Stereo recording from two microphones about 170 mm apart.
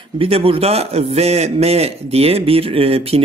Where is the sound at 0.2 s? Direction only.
35° right (ahead or behind).